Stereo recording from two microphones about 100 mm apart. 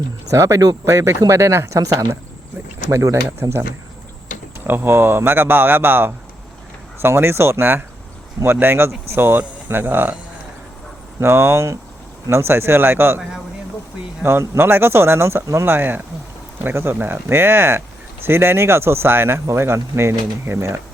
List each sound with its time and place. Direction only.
0.3 s speech: 30° right (ahead or behind)
4.6 s speech: 20° right (ahead or behind)
11.2 s speech: 25° right (ahead or behind)